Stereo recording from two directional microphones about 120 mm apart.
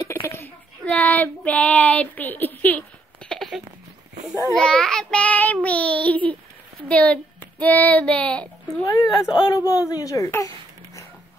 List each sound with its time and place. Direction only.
0.0 s a sound: 20° left (ahead or behind)
0.8 s child singing: 15° left (ahead or behind)
3.3 s a sound: centre (ahead or behind)
4.6 s child singing: 5° left (ahead or behind)
6.9 s a child's voice: 10° left (ahead or behind)
8.8 s speech: 30° left (ahead or behind)